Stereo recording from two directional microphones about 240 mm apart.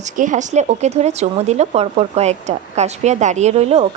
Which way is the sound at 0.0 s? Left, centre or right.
Right.